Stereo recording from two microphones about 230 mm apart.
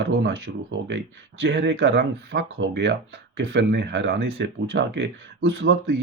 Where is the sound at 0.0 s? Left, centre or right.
Right.